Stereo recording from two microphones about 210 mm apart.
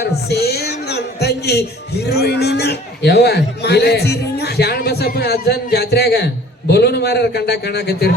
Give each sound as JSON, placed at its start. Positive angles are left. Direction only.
{"t": 0.0, "sound": "speech", "side_deg": 50}